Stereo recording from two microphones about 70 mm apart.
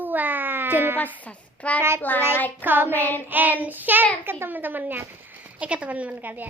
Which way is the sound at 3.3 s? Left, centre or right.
Right.